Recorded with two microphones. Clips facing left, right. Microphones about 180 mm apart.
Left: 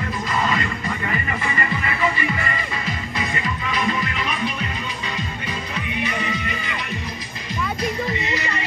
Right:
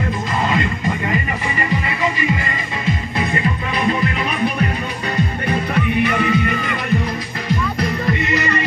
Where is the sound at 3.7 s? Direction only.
30° right (ahead or behind).